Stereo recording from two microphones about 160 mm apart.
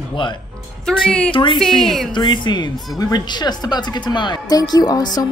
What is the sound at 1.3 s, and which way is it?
Speech, 35° left (ahead or behind).